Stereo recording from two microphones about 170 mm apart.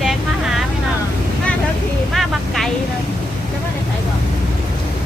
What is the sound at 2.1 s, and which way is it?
Speech, centre (ahead or behind).